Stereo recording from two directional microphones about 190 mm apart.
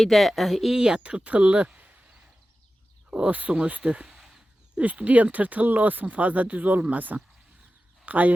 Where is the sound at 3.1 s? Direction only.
5° right (ahead or behind).